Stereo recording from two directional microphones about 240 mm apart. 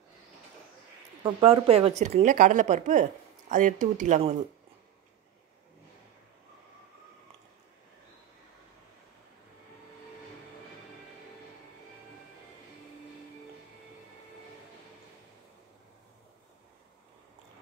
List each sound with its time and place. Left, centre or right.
1.2 s speech: right